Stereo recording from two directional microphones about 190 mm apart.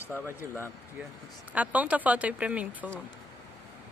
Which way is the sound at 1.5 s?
5° right (ahead or behind).